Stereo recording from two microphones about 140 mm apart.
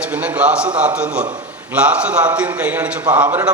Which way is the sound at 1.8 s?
10° right (ahead or behind).